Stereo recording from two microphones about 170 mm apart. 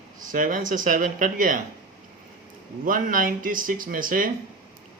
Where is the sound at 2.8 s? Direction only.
55° right (ahead or behind).